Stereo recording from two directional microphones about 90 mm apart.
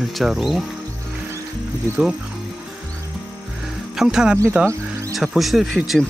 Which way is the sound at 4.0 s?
5° right (ahead or behind).